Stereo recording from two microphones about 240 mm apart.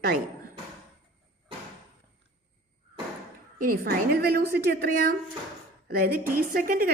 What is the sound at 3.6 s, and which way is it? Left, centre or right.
A woman's voice, right.